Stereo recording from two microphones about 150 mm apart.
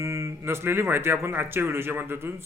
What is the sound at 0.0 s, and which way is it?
A man's voice, 20° right (ahead or behind).